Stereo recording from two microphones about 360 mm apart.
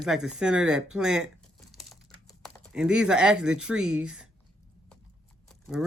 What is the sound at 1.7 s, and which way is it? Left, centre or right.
Typing, centre.